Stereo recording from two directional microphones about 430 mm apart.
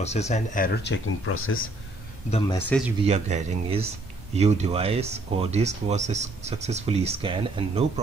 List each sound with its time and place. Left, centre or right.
0.0 s speech: centre
2.3 s speech: centre
3.1 s speech: centre